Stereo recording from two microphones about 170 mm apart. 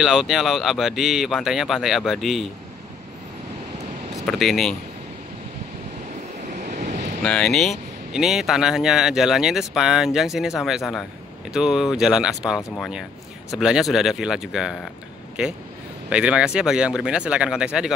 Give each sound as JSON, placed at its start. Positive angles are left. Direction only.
{"t": 0.0, "sound": "speech", "side_deg": -5}
{"t": 4.3, "sound": "speech", "side_deg": 0}
{"t": 6.6, "sound": "vehicle", "side_deg": -45}
{"t": 7.2, "sound": "speech", "side_deg": 5}